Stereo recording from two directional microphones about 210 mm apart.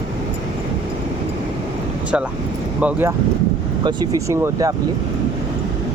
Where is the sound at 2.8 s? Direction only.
10° right (ahead or behind).